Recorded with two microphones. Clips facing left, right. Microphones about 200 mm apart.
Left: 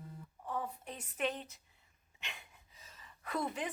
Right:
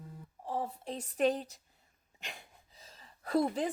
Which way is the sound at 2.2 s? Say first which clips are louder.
Right 3 dB; 35° right (ahead or behind).